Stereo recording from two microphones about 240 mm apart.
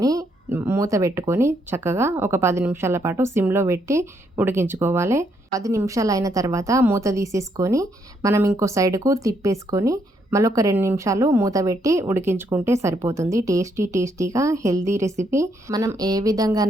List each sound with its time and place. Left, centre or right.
0.0 s speech: centre